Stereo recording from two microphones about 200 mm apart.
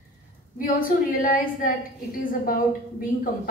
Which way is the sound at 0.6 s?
40° left (ahead or behind).